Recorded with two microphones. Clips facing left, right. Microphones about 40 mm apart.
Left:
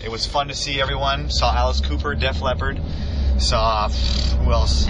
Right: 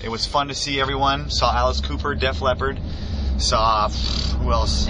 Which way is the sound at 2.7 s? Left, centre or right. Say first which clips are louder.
Left 2 dB; left.